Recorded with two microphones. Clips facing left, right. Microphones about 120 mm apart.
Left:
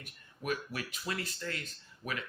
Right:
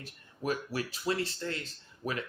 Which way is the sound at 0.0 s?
30° right (ahead or behind).